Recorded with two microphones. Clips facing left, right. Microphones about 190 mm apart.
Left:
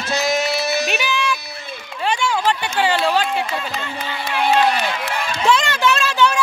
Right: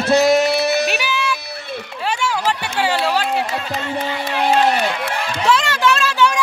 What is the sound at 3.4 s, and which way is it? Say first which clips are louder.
Speech: right 2 dB; 45° right (ahead or behind).